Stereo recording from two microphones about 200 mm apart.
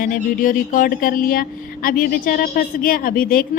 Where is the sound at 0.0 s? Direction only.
45° left (ahead or behind).